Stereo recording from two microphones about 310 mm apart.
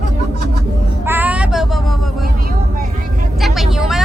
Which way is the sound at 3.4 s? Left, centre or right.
Centre.